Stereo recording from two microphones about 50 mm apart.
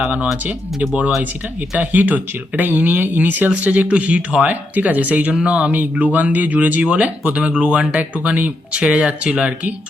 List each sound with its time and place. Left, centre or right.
0.4 s speech: right